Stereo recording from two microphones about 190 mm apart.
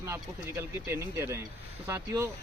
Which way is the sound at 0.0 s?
15° right (ahead or behind).